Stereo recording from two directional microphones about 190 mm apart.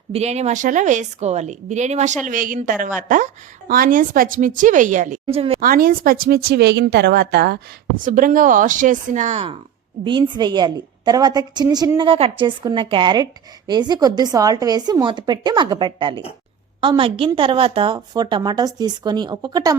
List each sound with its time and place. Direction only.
0.1 s a woman's voice: 35° right (ahead or behind)
5.2 s a woman's voice: 30° right (ahead or behind)
5.5 s speech: 50° right (ahead or behind)
8.0 s a woman's voice: 45° right (ahead or behind); by 19.7 s 20° right (ahead or behind)